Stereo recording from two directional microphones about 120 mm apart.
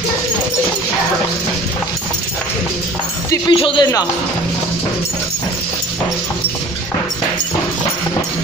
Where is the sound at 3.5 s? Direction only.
45° left (ahead or behind).